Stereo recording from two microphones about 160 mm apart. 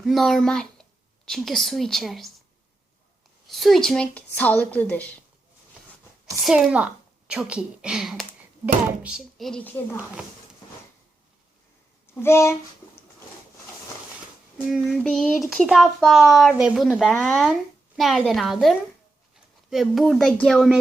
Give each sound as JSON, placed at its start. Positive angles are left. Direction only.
{"t": 0.0, "sound": "speech", "side_deg": 0}
{"t": 3.5, "sound": "speech", "side_deg": 0}
{"t": 6.4, "sound": "a woman's voice", "side_deg": -5}
{"t": 12.1, "sound": "speech", "side_deg": 15}
{"t": 14.7, "sound": "a child's voice", "side_deg": 0}